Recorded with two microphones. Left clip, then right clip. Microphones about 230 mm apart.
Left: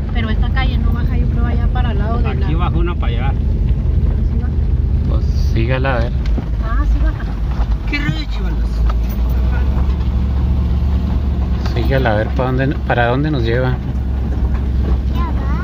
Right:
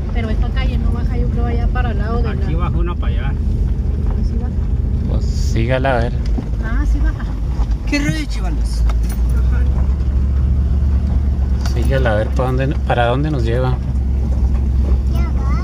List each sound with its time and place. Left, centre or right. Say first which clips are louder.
5.6 s speech: right 2 dB; centre
11.7 s speech: left 1 dB; centre